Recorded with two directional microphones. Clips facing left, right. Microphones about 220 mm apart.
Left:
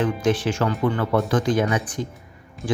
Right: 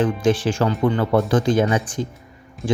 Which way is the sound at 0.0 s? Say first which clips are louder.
Right 3 dB; 30° right (ahead or behind).